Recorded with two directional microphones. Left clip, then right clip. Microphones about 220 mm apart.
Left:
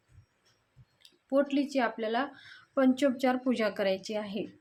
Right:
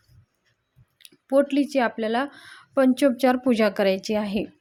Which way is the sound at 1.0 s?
35° right (ahead or behind).